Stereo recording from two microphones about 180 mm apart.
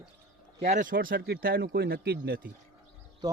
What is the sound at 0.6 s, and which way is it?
Speech, 45° right (ahead or behind).